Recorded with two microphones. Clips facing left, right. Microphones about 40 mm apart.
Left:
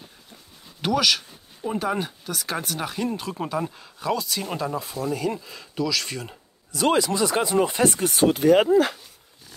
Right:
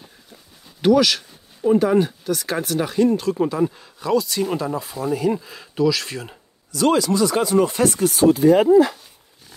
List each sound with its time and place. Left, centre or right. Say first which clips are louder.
0.0 s speech: right 1 dB; centre
6.7 s speech: right 3 dB; left